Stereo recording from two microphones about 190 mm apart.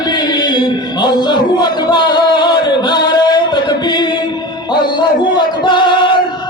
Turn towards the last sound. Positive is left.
turn(degrees=25)  # may be behind; listen again after turning